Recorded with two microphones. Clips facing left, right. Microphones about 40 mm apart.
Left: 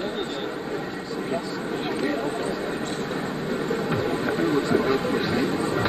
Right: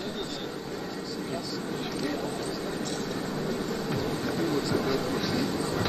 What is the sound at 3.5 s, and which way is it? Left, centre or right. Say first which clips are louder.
Train: left 9 dB; left.